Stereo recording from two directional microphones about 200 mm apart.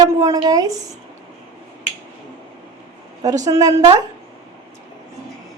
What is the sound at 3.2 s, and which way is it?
Speech, 15° right (ahead or behind).